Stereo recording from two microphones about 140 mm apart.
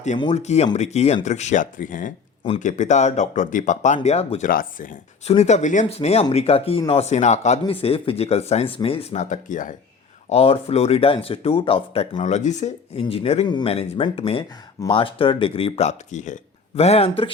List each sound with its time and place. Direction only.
0.3 s speech: 50° left (ahead or behind)
4.4 s speech: 75° left (ahead or behind)
5.2 s speech: 50° left (ahead or behind)
5.8 s speech: 50° left (ahead or behind)
7.7 s speech: 40° left (ahead or behind); by 9.7 s 65° left (ahead or behind)
10.2 s speech: 45° left (ahead or behind)
12.2 s speech: 60° left (ahead or behind)